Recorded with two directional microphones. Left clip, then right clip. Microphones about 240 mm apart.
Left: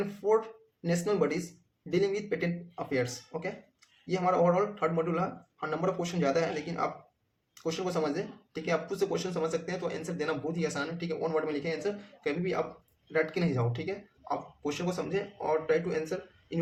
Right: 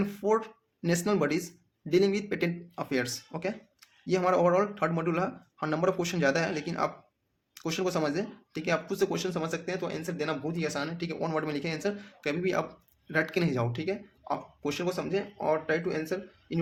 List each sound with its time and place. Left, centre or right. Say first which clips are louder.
0.0 s speech: even; right